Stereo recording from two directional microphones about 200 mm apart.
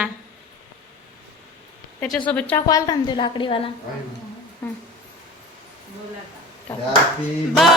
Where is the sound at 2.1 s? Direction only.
5° left (ahead or behind); by 3.6 s 25° left (ahead or behind).